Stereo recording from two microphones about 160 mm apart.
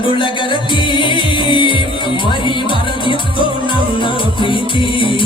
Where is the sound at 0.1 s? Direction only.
30° left (ahead or behind).